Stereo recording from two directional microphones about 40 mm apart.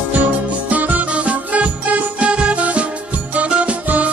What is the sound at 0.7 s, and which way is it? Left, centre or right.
Music, right.